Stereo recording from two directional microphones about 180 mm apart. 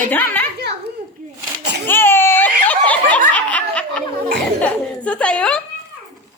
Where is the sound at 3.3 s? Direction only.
5° left (ahead or behind).